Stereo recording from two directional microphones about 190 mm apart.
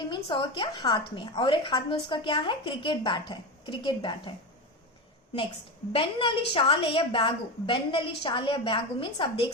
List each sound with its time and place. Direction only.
0.1 s a woman's voice: 25° left (ahead or behind)
5.9 s a woman's voice: 25° left (ahead or behind)